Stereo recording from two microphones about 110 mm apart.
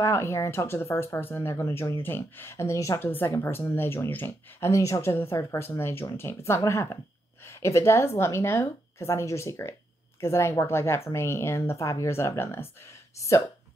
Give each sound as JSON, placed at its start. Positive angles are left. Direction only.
{"t": 0.0, "sound": "speech", "side_deg": 25}